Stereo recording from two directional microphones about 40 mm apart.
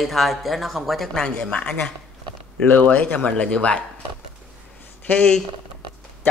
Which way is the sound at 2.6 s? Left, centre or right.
Left.